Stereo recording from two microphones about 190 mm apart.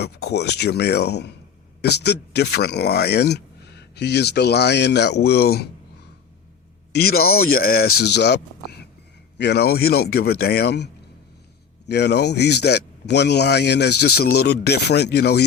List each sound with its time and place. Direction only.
0.0 s speech: 60° left (ahead or behind)
6.9 s speech: 55° left (ahead or behind)
7.3 s speech: 90° left
7.5 s speech: 50° left (ahead or behind)
11.9 s speech: 60° left (ahead or behind)